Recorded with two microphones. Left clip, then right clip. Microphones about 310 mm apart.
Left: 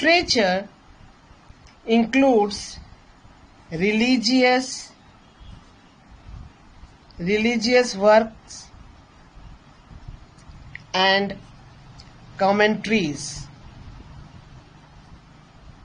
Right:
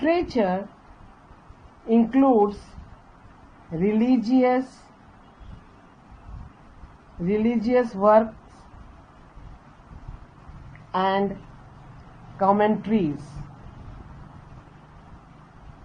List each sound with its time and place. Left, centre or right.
0.0 s a man's voice: left
1.9 s a man's voice: left
3.7 s a man's voice: left
7.3 s a man's voice: left
10.9 s a man's voice: left
12.4 s a man's voice: left